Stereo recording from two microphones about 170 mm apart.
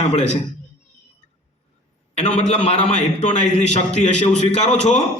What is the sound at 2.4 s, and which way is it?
A man's voice, 40° left (ahead or behind).